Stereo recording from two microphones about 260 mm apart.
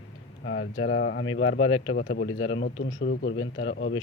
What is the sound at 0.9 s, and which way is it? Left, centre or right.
Speech, left.